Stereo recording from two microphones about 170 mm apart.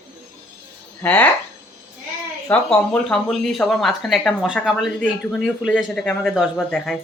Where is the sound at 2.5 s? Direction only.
5° left (ahead or behind).